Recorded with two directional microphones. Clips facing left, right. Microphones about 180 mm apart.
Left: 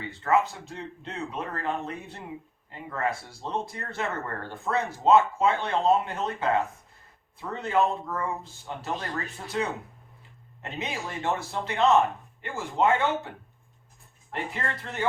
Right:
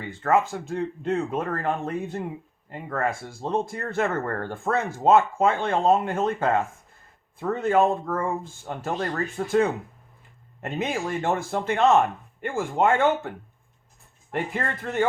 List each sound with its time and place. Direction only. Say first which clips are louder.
0.0 s speech: right 2 dB; 50° right (ahead or behind)
14.5 s speech: right 6 dB; 50° right (ahead or behind)